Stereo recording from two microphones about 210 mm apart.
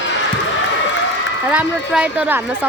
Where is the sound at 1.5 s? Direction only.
5° right (ahead or behind).